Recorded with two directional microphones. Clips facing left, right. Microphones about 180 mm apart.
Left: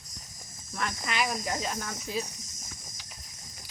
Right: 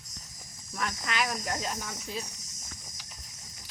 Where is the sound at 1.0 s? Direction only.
5° left (ahead or behind).